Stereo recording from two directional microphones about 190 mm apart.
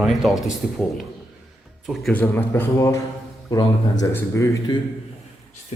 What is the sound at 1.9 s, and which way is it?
A man's voice, 5° left (ahead or behind).